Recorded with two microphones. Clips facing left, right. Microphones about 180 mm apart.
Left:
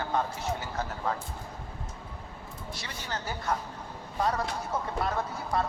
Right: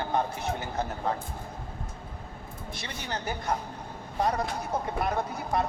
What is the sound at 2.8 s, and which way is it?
Speech, 20° right (ahead or behind).